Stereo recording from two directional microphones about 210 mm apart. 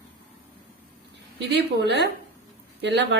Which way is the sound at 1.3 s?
50° right (ahead or behind).